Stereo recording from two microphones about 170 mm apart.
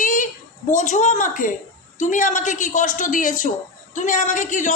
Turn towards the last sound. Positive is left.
turn(degrees=45)  # may be behind; listen again after turning